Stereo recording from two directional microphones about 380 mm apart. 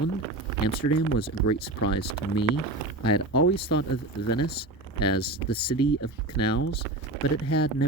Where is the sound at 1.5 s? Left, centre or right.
Left.